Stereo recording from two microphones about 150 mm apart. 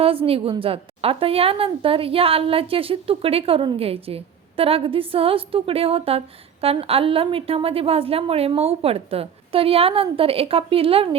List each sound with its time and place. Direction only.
0.0 s a woman's voice: 40° right (ahead or behind)